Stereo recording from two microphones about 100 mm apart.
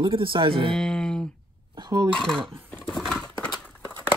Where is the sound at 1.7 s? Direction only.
45° right (ahead or behind).